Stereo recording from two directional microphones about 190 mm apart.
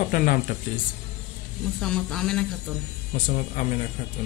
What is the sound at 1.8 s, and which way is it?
Speech, centre (ahead or behind).